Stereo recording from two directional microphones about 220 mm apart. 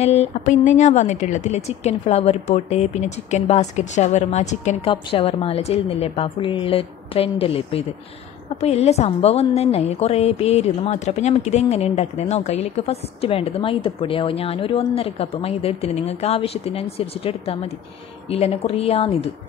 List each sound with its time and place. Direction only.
0.0 s speech: 30° left (ahead or behind)